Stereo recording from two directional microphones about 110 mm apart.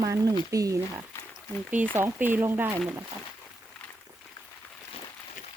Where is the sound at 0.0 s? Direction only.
30° right (ahead or behind).